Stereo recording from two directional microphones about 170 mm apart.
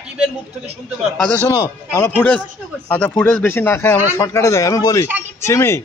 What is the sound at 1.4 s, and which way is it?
Speech, 20° left (ahead or behind).